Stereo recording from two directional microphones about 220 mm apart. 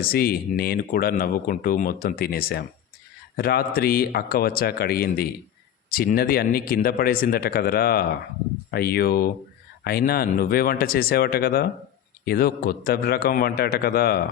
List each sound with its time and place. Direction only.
0.0 s speech: 45° left (ahead or behind)